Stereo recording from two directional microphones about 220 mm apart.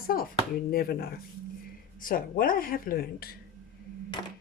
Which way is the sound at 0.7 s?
45° left (ahead or behind).